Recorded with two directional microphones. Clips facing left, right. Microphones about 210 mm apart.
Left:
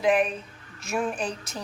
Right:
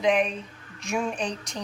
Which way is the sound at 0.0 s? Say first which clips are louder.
Even; 5° left (ahead or behind).